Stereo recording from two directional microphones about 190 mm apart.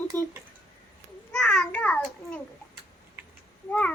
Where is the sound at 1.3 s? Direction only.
5° left (ahead or behind).